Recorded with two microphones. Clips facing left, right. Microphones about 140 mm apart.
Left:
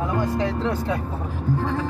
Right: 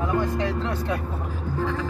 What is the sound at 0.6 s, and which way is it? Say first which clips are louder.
Speech: left 3 dB; 30° left (ahead or behind).